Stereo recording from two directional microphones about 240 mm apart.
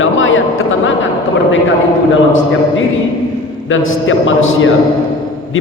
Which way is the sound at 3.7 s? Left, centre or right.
Left.